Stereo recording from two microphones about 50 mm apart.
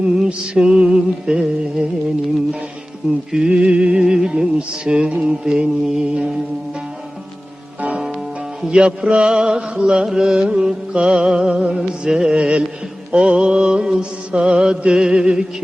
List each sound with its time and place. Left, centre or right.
0.0 s music: centre
3.3 s music: centre
8.6 s music: centre